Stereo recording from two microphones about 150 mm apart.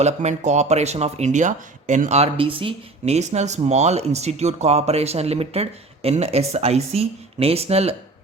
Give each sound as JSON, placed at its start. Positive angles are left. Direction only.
{"t": 0.0, "sound": "speech", "side_deg": -50}